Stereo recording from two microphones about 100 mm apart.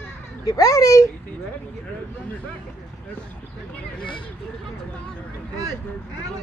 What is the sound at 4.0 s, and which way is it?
Speech, 55° left (ahead or behind).